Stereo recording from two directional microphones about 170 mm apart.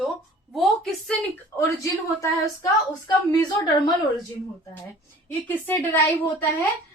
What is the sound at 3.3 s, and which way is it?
Speech, 25° left (ahead or behind).